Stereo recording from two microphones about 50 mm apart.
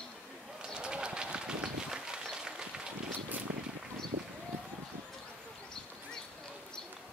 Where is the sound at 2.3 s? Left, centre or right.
Centre.